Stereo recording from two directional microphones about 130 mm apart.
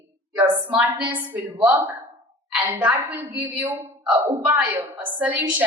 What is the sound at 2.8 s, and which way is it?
Speech, 10° right (ahead or behind).